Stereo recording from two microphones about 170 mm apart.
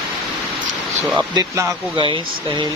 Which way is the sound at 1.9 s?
30° right (ahead or behind).